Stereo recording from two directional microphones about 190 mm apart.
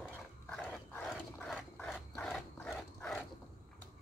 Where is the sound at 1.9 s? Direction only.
5° left (ahead or behind).